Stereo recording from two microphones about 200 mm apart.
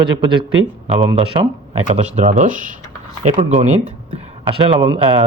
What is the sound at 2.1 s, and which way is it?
Speech, 35° right (ahead or behind).